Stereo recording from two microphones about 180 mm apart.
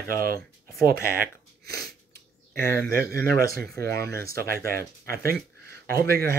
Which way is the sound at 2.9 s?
55° right (ahead or behind).